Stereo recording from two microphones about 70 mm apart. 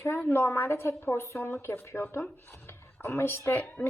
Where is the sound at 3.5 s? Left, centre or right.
Left.